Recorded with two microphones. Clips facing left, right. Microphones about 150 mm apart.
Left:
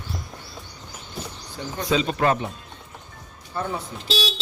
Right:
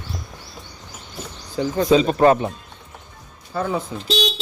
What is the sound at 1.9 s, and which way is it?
Speech, 35° right (ahead or behind).